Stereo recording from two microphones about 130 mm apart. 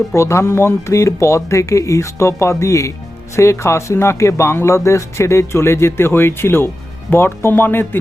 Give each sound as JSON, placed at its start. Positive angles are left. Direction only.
{"t": 0.1, "sound": "speech", "side_deg": 20}